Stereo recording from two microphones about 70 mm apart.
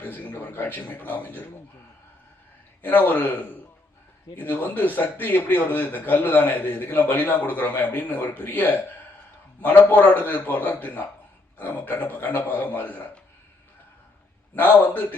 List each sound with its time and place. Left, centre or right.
0.0 s a man's voice: left
2.8 s a man's voice: left
14.5 s a man's voice: left